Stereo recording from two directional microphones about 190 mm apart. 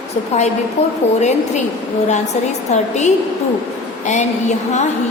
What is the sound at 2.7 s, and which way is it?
Speech, 35° left (ahead or behind).